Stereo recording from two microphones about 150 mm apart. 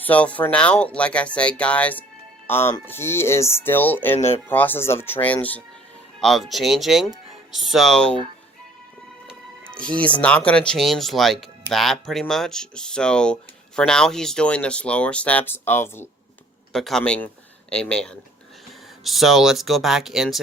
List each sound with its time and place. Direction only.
0.0 s speech: 10° left (ahead or behind)
9.6 s speech: 5° left (ahead or behind)
16.7 s speech: 5° left (ahead or behind)